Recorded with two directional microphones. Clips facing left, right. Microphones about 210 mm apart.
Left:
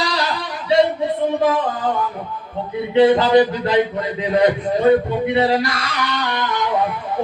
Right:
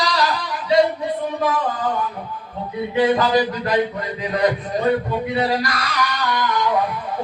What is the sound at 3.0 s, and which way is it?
Music, 25° left (ahead or behind).